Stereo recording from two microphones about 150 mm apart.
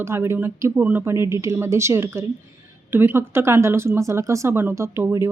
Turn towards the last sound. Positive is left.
turn(degrees=-20)  # may be behind; listen again after turning